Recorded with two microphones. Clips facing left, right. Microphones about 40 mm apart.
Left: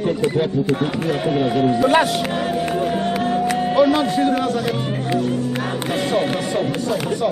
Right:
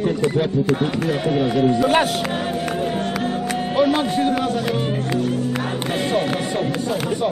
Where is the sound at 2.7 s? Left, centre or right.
Centre.